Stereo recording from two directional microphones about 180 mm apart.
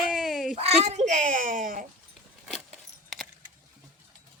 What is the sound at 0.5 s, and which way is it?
Speech, 35° right (ahead or behind).